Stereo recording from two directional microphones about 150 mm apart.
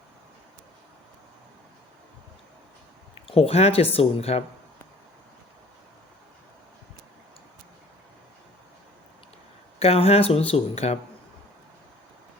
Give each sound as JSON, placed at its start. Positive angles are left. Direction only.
{"t": 3.2, "sound": "speech", "side_deg": 40}
{"t": 9.7, "sound": "speech", "side_deg": 40}